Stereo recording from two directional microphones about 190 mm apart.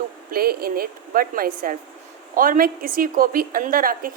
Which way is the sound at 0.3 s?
50° right (ahead or behind).